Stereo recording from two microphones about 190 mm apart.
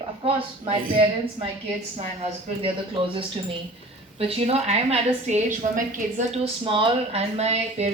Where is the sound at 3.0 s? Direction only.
25° right (ahead or behind).